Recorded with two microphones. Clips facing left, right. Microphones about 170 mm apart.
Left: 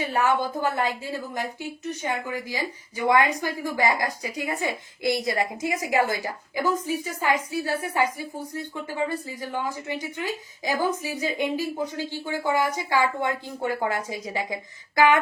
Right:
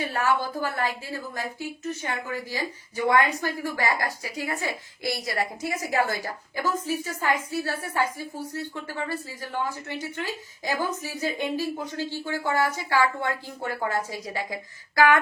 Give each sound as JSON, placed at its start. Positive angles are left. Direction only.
{"t": 0.1, "sound": "a woman's voice", "side_deg": 20}